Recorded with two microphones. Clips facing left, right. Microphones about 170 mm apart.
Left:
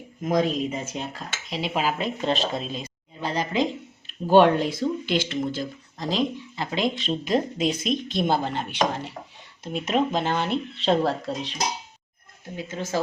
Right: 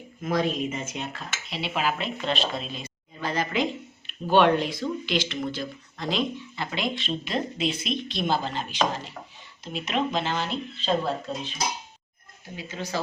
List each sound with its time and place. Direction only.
0.3 s speech: 40° left (ahead or behind)
4.3 s speech: 45° left (ahead or behind)
6.0 s speech: 35° left (ahead or behind); by 8.8 s 60° left (ahead or behind)
9.7 s speech: 45° left (ahead or behind); by 11.5 s 85° left
12.5 s speech: 45° left (ahead or behind)